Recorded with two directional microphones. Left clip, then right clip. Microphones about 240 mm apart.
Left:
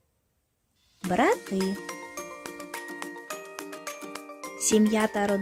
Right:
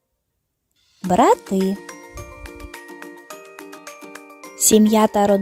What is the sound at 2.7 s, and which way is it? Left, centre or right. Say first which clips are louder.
Music: even; centre.